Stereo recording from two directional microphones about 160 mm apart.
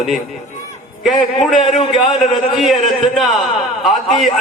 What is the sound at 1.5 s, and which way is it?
Speech, 45° left (ahead or behind).